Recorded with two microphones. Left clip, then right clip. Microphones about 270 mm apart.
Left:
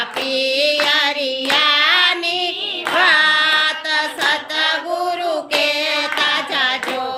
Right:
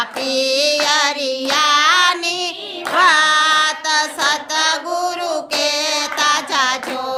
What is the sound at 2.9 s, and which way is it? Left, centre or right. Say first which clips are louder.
Child singing: right 1 dB; centre.